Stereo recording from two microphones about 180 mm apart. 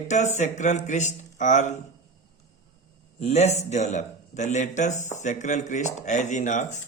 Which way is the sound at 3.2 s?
40° left (ahead or behind).